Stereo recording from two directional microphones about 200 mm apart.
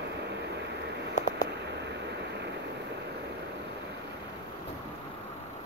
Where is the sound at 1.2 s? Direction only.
35° left (ahead or behind).